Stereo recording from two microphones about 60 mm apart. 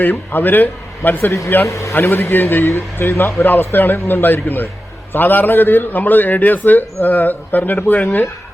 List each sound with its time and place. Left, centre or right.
0.0 s a man's voice: left
1.6 s a man's voice: left
2.0 s a man's voice: left